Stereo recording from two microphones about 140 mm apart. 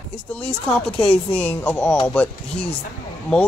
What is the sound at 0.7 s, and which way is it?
Speech, 5° left (ahead or behind).